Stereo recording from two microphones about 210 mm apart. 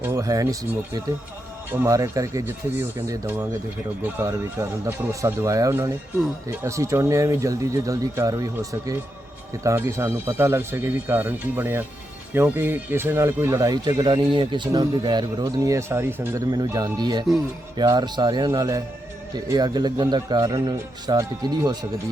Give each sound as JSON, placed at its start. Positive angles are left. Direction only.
{"t": 0.0, "sound": "speech", "side_deg": -15}
{"t": 1.7, "sound": "speech", "side_deg": -15}
{"t": 9.6, "sound": "speech", "side_deg": -15}